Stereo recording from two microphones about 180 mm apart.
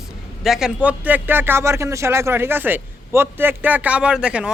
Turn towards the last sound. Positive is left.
turn(degrees=-5)  # may be behind; listen again after turning